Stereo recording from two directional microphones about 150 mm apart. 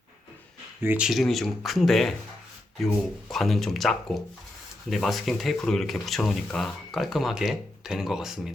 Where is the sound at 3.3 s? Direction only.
Centre (ahead or behind).